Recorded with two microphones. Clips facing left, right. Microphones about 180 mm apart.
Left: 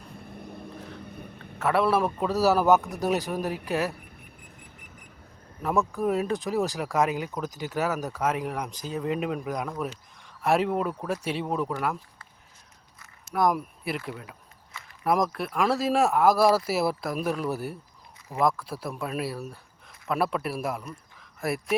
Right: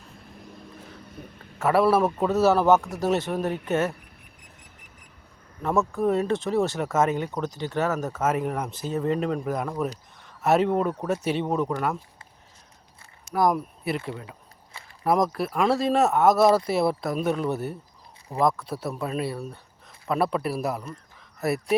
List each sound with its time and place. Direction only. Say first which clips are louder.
0.2 s vehicle: left 4 dB; 55° left (ahead or behind)
1.5 s speech: right 3 dB; 5° right (ahead or behind)
5.6 s speech: right 2 dB; centre (ahead or behind)
13.2 s speech: right 2 dB; centre (ahead or behind)
15.0 s speech: right 2 dB; centre (ahead or behind)